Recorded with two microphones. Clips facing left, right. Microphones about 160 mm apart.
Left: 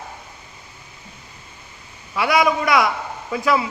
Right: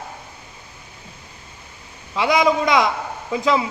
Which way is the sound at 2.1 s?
20° right (ahead or behind).